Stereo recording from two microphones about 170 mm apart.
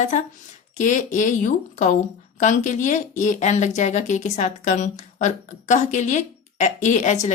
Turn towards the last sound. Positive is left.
turn(degrees=45)  # may be behind; listen again after turning